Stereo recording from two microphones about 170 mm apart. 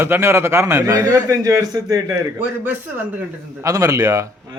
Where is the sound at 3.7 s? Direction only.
20° right (ahead or behind).